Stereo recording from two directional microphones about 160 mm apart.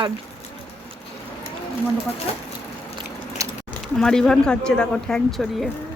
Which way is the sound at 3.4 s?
20° right (ahead or behind).